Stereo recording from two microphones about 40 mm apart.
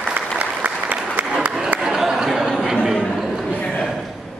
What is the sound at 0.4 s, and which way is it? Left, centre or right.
Applause, right.